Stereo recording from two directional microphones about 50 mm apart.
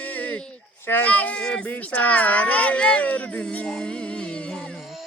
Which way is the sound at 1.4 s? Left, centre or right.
Centre.